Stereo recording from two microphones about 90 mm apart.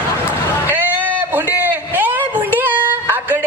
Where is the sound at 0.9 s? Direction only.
15° right (ahead or behind).